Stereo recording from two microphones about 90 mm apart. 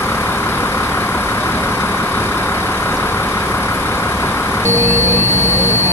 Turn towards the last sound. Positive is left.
turn(degrees=30)  # may be behind; listen again after turning